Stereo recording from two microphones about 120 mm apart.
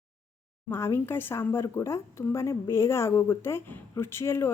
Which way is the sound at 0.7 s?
20° left (ahead or behind).